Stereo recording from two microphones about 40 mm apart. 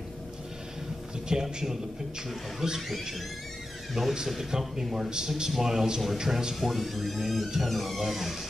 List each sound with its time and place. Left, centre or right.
1.3 s a man's voice: centre
4.0 s a man's voice: centre
6.6 s speech: centre